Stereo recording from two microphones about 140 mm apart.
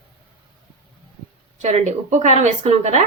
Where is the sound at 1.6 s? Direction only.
55° right (ahead or behind).